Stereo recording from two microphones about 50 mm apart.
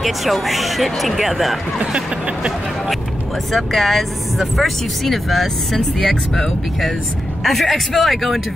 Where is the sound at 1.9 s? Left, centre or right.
Centre.